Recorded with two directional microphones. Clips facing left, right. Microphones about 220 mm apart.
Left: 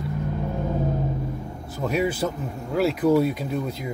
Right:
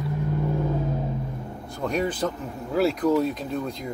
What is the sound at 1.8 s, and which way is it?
Speech, 5° left (ahead or behind).